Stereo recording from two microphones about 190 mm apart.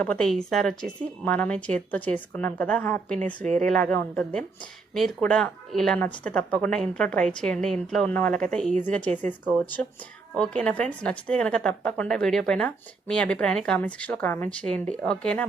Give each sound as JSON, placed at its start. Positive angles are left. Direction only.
{"t": 0.0, "sound": "a woman's voice", "side_deg": 5}
{"t": 3.4, "sound": "speech", "side_deg": -40}
{"t": 3.7, "sound": "a woman's voice", "side_deg": 5}